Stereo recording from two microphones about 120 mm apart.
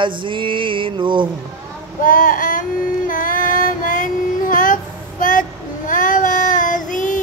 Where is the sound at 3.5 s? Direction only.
90° left.